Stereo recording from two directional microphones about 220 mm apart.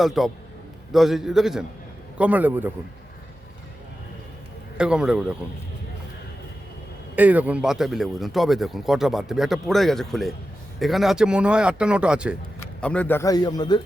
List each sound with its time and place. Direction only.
0.0 s a man's voice: centre (ahead or behind)
4.8 s speech: 5° right (ahead or behind)
7.2 s speech: 5° right (ahead or behind)
12.8 s a man's voice: 5° left (ahead or behind)